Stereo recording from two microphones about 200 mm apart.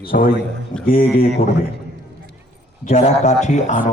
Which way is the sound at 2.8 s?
35° left (ahead or behind).